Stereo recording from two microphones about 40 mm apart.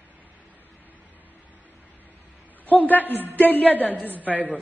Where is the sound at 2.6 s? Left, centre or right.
Left.